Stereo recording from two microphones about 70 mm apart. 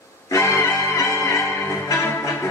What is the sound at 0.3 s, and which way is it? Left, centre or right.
Music, left.